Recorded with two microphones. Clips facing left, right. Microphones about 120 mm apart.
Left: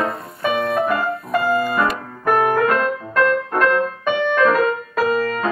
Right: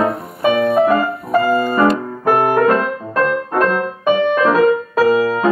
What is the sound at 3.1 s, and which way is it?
Music, 25° right (ahead or behind).